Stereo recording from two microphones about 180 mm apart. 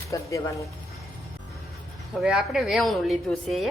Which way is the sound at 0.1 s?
15° left (ahead or behind).